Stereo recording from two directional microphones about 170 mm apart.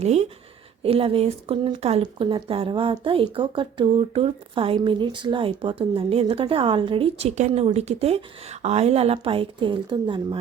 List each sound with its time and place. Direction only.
0.0 s speech: 40° right (ahead or behind)